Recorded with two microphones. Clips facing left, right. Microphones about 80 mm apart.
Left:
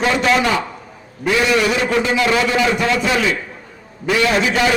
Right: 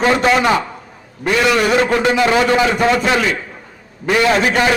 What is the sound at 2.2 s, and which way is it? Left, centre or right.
Speech, right.